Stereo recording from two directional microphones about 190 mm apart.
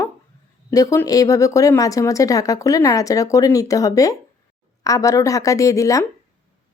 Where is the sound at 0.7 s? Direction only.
15° left (ahead or behind).